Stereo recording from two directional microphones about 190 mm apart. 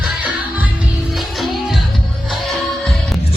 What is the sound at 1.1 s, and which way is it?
Music, centre (ahead or behind).